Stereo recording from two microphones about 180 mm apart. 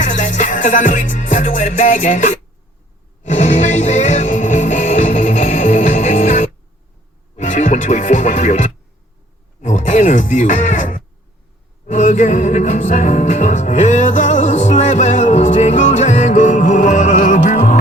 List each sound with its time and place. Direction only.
0.0 s music: 45° left (ahead or behind)
7.3 s speech: 40° left (ahead or behind)
11.9 s music: 45° left (ahead or behind)